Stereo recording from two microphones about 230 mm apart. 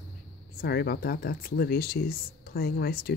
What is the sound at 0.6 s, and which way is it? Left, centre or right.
Speech, left.